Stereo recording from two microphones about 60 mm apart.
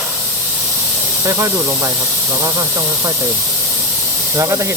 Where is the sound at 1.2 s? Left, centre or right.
Right.